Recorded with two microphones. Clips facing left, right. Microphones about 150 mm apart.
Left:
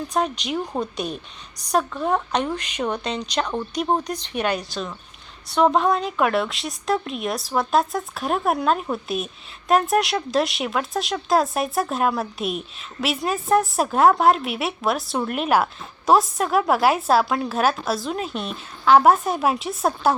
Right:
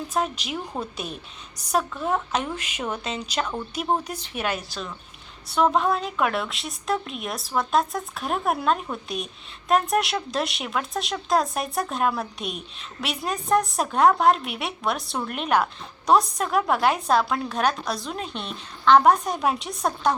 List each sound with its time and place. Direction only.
0.1 s a woman's voice: centre (ahead or behind)
0.6 s a woman's voice: 15° left (ahead or behind)
0.9 s a woman's voice: centre (ahead or behind)